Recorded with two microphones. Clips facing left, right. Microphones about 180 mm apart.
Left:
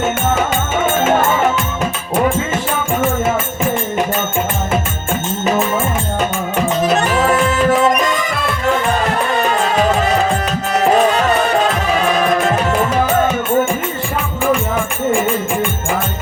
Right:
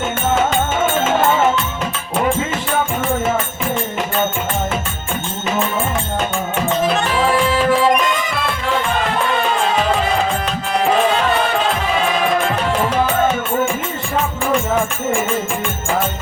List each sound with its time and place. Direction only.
6.8 s music: 45° left (ahead or behind)
12.1 s music: 45° left (ahead or behind)